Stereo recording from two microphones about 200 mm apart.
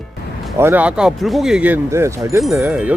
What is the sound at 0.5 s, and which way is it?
Speech, 10° right (ahead or behind).